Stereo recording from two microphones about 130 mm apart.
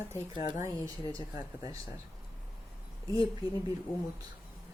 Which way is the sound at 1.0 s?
40° left (ahead or behind).